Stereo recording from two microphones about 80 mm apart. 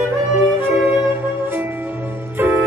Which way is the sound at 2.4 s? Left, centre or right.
Right.